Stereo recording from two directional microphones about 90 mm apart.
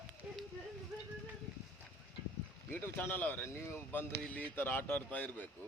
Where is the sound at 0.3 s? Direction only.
15° right (ahead or behind).